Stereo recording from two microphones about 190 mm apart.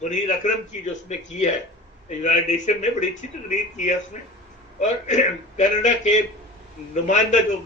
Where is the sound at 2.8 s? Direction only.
40° left (ahead or behind).